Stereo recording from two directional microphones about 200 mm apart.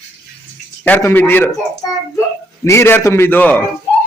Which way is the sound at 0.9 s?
10° left (ahead or behind).